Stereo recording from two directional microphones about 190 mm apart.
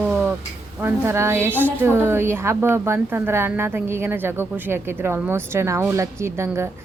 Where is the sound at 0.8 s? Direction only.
15° right (ahead or behind).